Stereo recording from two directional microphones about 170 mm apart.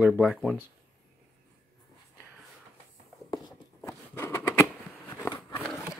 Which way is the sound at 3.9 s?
15° left (ahead or behind).